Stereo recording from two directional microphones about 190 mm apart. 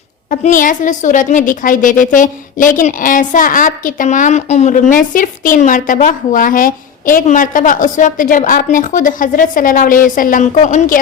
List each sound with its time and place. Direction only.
0.3 s a woman's voice: 45° left (ahead or behind)